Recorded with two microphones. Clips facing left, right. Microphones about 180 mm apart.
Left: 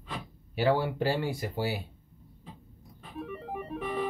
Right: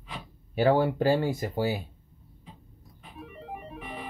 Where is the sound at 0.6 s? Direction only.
45° right (ahead or behind).